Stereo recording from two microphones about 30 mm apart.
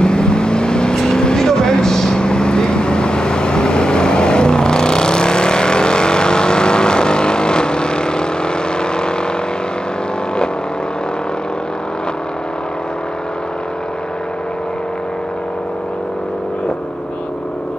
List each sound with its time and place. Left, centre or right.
0.0 s vehicle: left
2.2 s vehicle: left